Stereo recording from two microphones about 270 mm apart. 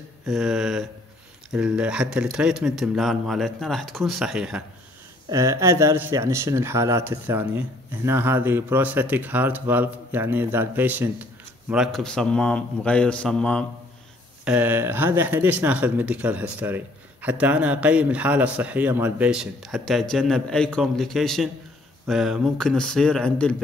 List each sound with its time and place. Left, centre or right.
0.3 s speech: centre